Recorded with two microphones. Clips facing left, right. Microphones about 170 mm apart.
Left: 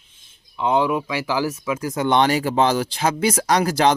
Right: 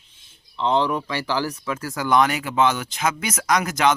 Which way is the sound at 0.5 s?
10° left (ahead or behind).